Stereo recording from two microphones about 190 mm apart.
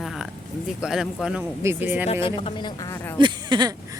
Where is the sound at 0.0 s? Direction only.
Centre (ahead or behind).